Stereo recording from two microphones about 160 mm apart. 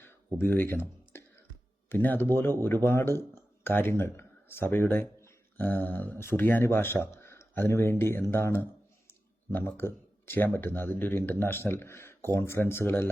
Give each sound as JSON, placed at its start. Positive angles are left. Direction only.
{"t": 0.3, "sound": "speech", "side_deg": 10}